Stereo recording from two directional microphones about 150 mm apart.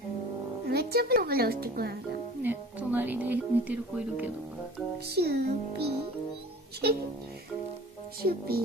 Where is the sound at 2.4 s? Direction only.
10° right (ahead or behind).